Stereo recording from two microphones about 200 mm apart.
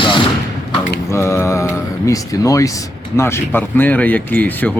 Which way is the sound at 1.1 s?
15° left (ahead or behind).